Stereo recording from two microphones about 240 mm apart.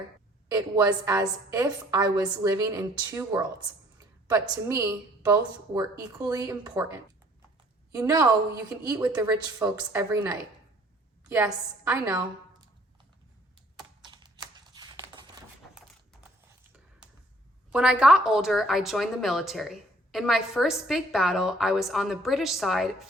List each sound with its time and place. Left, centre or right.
0.4 s a woman's voice: centre
14.0 s typing: centre
17.7 s a woman's voice: centre